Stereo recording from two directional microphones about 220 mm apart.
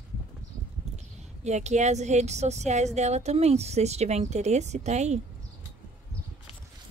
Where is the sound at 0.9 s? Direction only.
30° right (ahead or behind).